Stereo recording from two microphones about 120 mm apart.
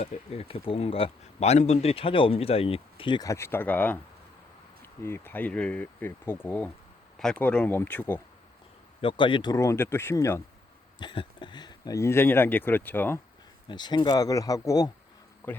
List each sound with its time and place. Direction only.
0.0 s speech: 60° left (ahead or behind)
3.2 s speech: 25° left (ahead or behind)
5.0 s speech: 20° left (ahead or behind)
9.0 s speech: 45° left (ahead or behind)
9.6 s speech: 20° left (ahead or behind)
11.0 s speech: 40° left (ahead or behind)
11.9 s speech: 20° left (ahead or behind)
13.7 s speech: 40° left (ahead or behind)
15.4 s speech: 20° left (ahead or behind)